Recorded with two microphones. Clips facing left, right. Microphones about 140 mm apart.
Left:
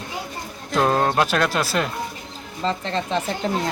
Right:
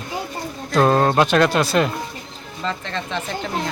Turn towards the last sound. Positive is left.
turn(degrees=35)  # may be behind; listen again after turning